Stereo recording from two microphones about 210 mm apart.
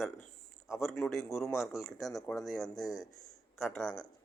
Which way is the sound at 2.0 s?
15° left (ahead or behind).